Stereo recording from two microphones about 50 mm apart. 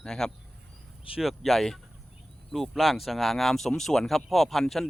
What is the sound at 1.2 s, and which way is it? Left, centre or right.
Speech, centre.